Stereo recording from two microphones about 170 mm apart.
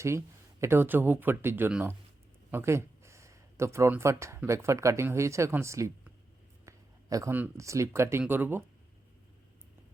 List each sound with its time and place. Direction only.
0.6 s speech: 15° right (ahead or behind)